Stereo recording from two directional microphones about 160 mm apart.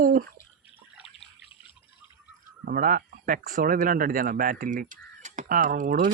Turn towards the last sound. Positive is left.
turn(degrees=-60)  # may be behind; listen again after turning